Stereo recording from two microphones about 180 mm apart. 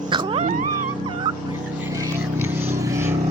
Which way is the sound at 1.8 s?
15° right (ahead or behind).